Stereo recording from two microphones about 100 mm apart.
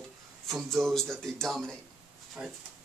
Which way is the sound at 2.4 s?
15° right (ahead or behind).